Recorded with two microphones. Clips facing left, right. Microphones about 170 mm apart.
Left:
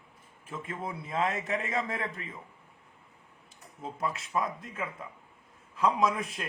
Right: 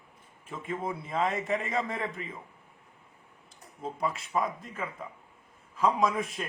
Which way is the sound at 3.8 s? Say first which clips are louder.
Right 2 dB; centre (ahead or behind).